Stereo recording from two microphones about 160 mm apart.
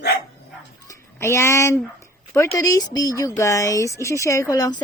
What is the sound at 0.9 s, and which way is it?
A woman's voice, 15° left (ahead or behind).